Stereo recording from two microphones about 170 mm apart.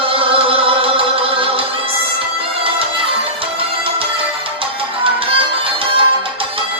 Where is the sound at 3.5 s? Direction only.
30° right (ahead or behind).